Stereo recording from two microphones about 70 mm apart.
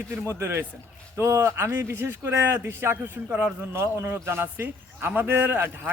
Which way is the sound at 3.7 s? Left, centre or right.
Right.